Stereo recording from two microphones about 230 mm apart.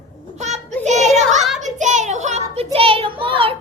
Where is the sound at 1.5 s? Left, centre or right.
Right.